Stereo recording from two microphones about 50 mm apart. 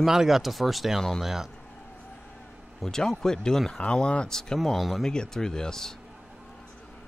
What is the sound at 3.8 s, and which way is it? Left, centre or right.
Speech, left.